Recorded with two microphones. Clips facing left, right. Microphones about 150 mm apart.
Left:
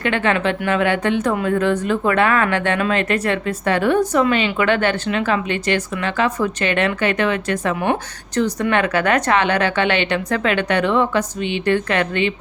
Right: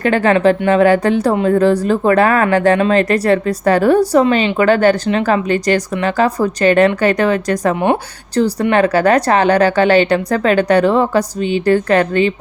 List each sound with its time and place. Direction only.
0.0 s a woman's voice: 40° right (ahead or behind)